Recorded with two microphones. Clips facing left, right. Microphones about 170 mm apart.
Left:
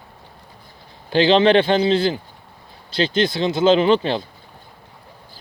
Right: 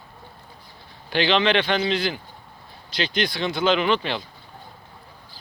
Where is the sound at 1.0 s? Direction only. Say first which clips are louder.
Left 6 dB; 25° left (ahead or behind).